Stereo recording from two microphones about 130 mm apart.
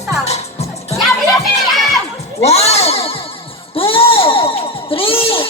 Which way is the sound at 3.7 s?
45° left (ahead or behind).